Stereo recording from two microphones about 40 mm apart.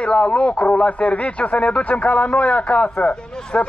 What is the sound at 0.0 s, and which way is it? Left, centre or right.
Speech, left.